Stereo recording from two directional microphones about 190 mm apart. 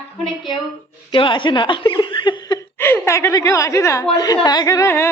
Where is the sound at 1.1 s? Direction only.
25° left (ahead or behind).